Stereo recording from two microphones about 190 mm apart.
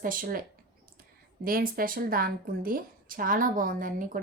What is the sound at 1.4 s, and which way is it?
A woman's voice, 50° right (ahead or behind).